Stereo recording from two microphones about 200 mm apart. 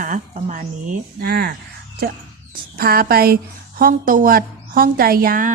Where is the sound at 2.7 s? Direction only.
50° right (ahead or behind).